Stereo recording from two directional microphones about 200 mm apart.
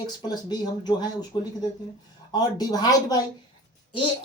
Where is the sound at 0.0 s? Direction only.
20° left (ahead or behind).